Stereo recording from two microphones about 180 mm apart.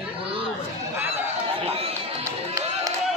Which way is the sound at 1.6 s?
35° right (ahead or behind).